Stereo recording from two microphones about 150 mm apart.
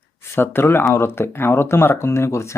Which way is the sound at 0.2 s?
15° left (ahead or behind).